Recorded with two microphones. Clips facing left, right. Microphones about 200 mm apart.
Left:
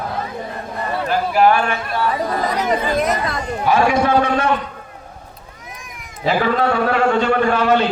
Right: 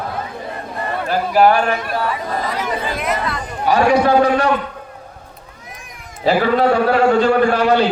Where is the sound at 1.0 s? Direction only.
40° right (ahead or behind).